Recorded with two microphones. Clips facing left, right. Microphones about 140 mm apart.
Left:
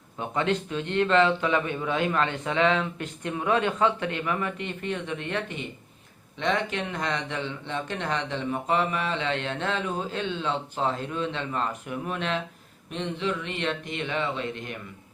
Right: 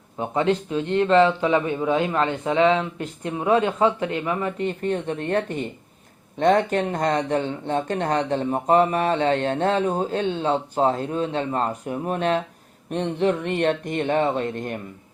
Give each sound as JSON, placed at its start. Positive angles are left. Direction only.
{"t": 0.2, "sound": "speech", "side_deg": -30}
{"t": 4.5, "sound": "speech", "side_deg": -40}
{"t": 12.9, "sound": "speech", "side_deg": -50}